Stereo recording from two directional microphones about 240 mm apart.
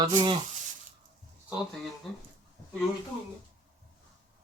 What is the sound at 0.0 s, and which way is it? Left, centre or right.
Sizzle, centre.